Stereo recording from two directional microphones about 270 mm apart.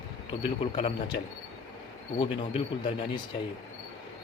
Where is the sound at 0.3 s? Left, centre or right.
Centre.